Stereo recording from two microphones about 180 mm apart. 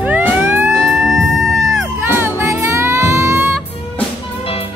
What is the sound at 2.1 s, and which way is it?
Music, 15° right (ahead or behind).